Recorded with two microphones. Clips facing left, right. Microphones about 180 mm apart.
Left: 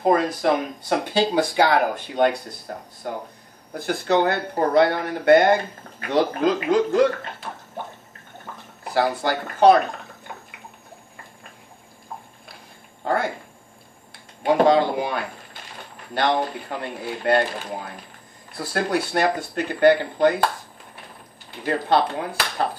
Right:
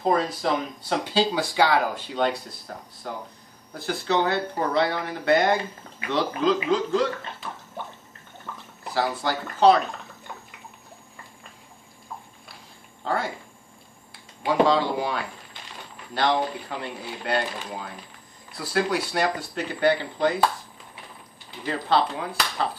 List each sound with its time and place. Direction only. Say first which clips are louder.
0.1 s speech: left 4 dB; 55° left (ahead or behind)
3.7 s speech: left 4 dB; 50° left (ahead or behind)
8.8 s speech: left 4 dB; 55° left (ahead or behind)
13.0 s speech: left 4 dB; 55° left (ahead or behind)
16.2 s speech: left 2 dB; 50° left (ahead or behind)